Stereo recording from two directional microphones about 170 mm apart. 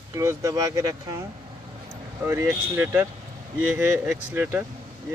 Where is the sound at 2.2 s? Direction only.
15° right (ahead or behind).